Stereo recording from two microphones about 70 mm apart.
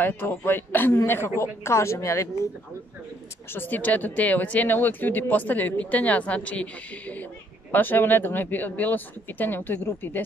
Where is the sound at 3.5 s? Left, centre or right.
Left.